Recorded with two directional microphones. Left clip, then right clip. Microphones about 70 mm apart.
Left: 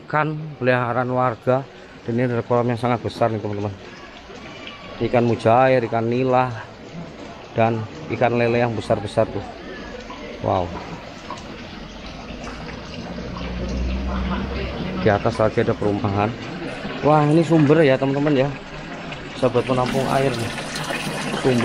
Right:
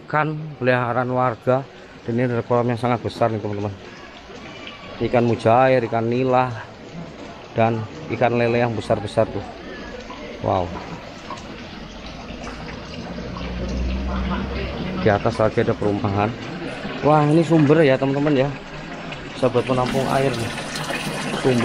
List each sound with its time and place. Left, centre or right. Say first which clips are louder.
0.1 s speech: even; centre
2.1 s a man's voice: even; centre
5.2 s a man's voice: even; centre
7.5 s a man's voice: even; centre
10.4 s a man's voice: even; centre
13.4 s a sound: even; right
15.0 s a man's voice: even; centre
20.8 s water: even; centre